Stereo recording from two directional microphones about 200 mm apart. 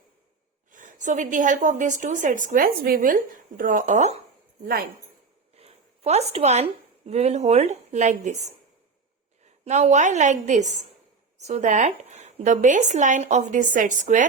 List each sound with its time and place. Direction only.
0.7 s speech: 40° right (ahead or behind)
4.6 s a woman's voice: 50° right (ahead or behind)
5.5 s zipper: 30° right (ahead or behind)
7.1 s speech: 35° right (ahead or behind)
9.6 s speech: 35° right (ahead or behind)